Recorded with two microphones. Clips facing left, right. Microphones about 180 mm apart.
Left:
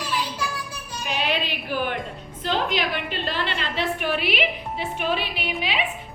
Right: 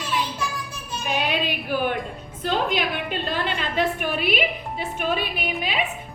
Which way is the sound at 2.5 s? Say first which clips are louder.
Right 1 dB; 50° right (ahead or behind).